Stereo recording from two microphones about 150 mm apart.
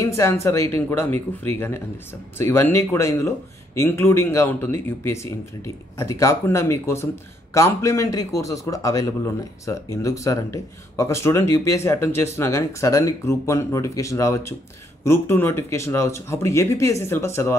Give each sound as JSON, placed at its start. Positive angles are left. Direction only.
{"t": 0.0, "sound": "a man's voice", "side_deg": 20}